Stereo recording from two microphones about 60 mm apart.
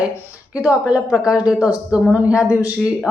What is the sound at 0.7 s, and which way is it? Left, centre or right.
A woman's voice, right.